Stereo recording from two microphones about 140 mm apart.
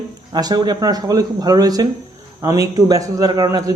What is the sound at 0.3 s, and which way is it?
A man's voice, 30° right (ahead or behind).